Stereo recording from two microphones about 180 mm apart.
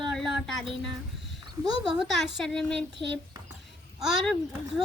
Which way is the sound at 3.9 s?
Centre (ahead or behind).